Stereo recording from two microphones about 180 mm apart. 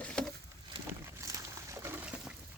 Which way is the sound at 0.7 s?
30° right (ahead or behind).